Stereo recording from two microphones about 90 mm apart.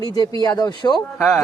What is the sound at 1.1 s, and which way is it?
Speech, 5° left (ahead or behind).